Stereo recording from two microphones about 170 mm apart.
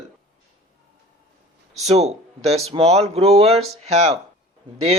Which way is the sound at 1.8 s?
40° right (ahead or behind).